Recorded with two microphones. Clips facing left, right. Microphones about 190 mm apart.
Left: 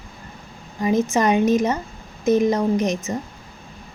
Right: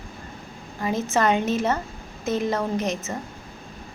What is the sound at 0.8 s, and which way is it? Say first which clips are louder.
A woman's voice: left 4 dB; 20° left (ahead or behind).